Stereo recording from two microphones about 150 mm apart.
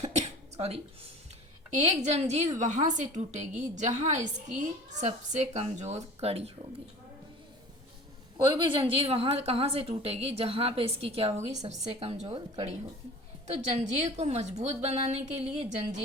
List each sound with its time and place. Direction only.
0.0 s a sound: 50° right (ahead or behind)
1.8 s a woman's voice: 45° right (ahead or behind)
8.4 s a woman's voice: 35° right (ahead or behind)